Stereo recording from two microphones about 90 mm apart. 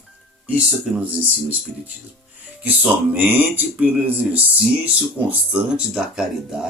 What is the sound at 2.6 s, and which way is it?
Speech, 20° right (ahead or behind).